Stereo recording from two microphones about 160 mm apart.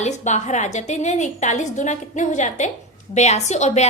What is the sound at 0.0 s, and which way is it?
A woman's voice, 45° left (ahead or behind).